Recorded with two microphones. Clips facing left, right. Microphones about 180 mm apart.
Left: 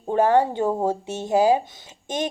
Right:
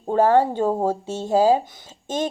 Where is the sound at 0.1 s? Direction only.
15° left (ahead or behind).